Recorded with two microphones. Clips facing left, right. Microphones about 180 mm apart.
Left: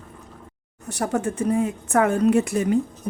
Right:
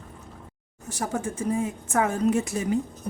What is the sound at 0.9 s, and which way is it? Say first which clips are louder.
Speech: left 5 dB; 65° left (ahead or behind).